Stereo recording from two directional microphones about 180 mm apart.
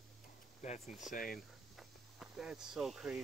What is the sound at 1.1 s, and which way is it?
Speech, 50° left (ahead or behind).